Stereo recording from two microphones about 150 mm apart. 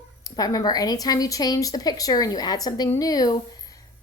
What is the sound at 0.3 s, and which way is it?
A woman's voice, 25° left (ahead or behind).